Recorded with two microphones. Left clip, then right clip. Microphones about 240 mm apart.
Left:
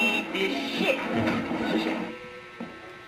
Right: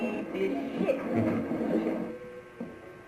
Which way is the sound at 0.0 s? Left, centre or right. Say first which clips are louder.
Left 6 dB; centre.